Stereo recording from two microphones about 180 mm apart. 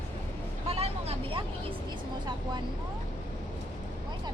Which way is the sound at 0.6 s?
35° right (ahead or behind).